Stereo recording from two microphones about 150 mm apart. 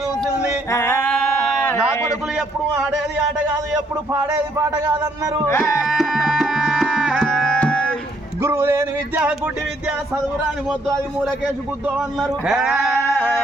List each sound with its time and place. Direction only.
0.7 s singing: 15° left (ahead or behind)
1.4 s a sound: 5° left (ahead or behind)
1.7 s a man's voice: 20° left (ahead or behind)
4.1 s a man's voice: 20° right (ahead or behind)
5.5 s music: 15° left (ahead or behind)
5.8 s music: centre (ahead or behind)
7.2 s music: 5° left (ahead or behind)
8.4 s speech: 20° right (ahead or behind)
10.7 s speech: 5° right (ahead or behind)